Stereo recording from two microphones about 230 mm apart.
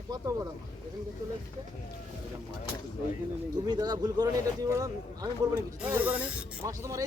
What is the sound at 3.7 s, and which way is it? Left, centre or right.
Speech, centre.